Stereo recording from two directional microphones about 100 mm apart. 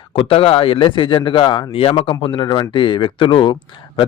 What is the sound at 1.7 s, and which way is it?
Speech, 70° left (ahead or behind).